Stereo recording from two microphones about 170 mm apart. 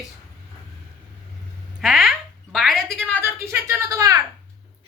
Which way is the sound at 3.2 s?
15° right (ahead or behind).